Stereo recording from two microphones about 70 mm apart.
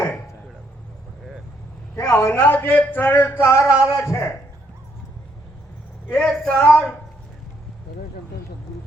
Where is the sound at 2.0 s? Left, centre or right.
Left.